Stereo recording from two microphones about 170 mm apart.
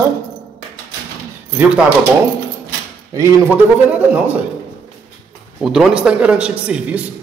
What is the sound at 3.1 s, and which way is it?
Speech, 15° right (ahead or behind).